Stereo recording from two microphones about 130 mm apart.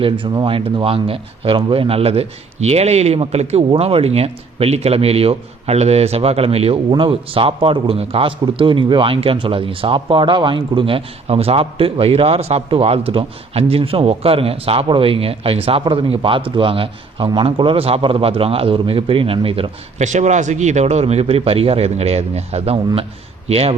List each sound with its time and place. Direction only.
0.0 s speech: 40° right (ahead or behind)
20.0 s speech: 60° right (ahead or behind)